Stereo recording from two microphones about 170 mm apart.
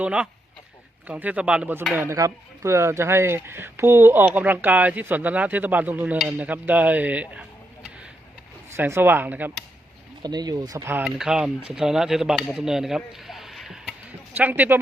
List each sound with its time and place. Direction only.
0.0 s speech: 5° right (ahead or behind)
10.2 s speech: 25° right (ahead or behind)
11.0 s speech: 5° right (ahead or behind)